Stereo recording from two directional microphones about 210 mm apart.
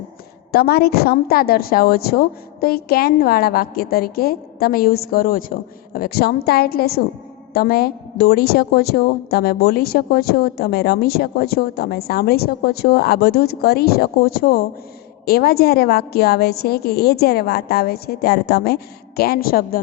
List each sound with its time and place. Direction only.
0.5 s a woman's voice: 50° left (ahead or behind)